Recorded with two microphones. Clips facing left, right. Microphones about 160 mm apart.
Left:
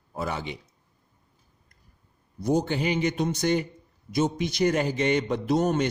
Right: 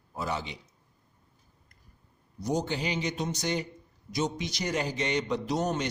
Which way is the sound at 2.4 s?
55° left (ahead or behind).